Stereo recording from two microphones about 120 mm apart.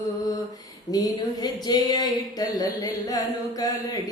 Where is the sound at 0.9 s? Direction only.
35° left (ahead or behind).